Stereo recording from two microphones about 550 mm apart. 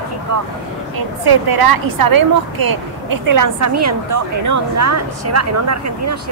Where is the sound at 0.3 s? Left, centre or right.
Right.